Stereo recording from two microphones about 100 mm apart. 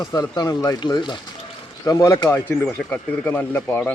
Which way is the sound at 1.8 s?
35° left (ahead or behind).